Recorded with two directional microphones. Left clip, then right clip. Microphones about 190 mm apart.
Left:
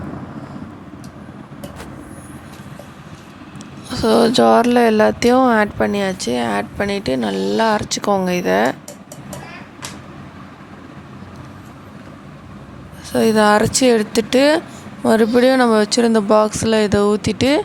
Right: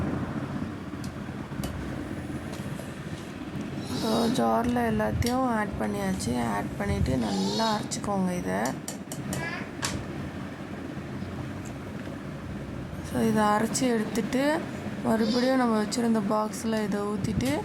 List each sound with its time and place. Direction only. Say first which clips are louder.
4.0 s speech: left 14 dB; 40° left (ahead or behind)
13.1 s speech: left 12 dB; 40° left (ahead or behind)